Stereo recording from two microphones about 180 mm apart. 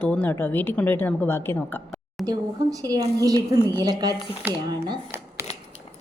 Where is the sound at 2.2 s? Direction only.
20° right (ahead or behind).